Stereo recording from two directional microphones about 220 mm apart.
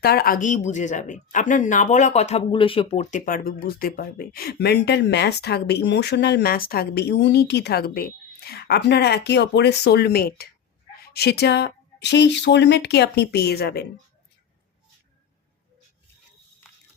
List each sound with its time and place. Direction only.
0.0 s speech: 45° left (ahead or behind)